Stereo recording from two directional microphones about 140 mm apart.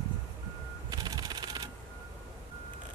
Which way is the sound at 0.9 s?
30° right (ahead or behind).